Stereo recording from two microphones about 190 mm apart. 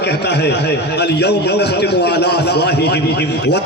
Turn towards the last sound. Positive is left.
turn(degrees=60)  # may be behind; listen again after turning